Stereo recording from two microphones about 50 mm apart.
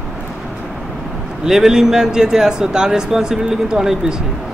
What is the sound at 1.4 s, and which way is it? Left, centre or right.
Speech, centre.